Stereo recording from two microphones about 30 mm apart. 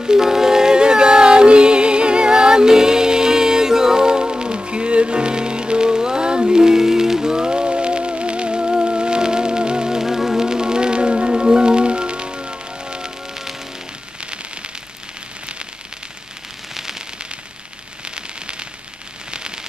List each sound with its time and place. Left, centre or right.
0.0 s music: centre
10.0 s music: centre; by 13.1 s right
18.0 s rain on surface: right
19.3 s a sound: right